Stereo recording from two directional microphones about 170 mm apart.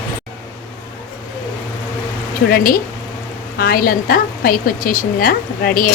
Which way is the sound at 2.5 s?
60° left (ahead or behind).